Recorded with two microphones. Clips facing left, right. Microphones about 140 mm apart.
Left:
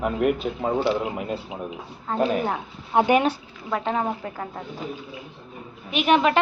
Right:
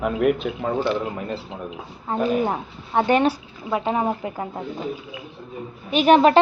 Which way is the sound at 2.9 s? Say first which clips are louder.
Even; 10° left (ahead or behind).